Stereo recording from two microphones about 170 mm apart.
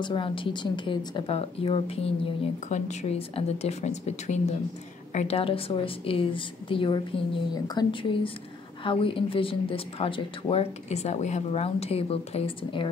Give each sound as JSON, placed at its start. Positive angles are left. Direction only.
{"t": 0.0, "sound": "speech", "side_deg": 30}